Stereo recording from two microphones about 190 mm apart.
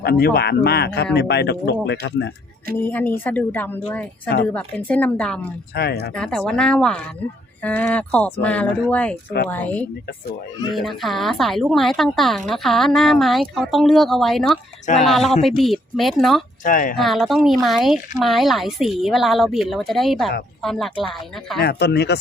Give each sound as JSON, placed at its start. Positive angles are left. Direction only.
{"t": 0.0, "sound": "speech", "side_deg": 55}
{"t": 2.8, "sound": "speech", "side_deg": 10}
{"t": 5.7, "sound": "speech", "side_deg": 55}
{"t": 6.1, "sound": "a woman's voice", "side_deg": 5}
{"t": 16.6, "sound": "speech", "side_deg": 45}
{"t": 17.0, "sound": "a woman's voice", "side_deg": 0}
{"t": 21.6, "sound": "speech", "side_deg": 55}